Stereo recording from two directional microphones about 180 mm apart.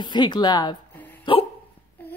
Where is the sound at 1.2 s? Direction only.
30° left (ahead or behind).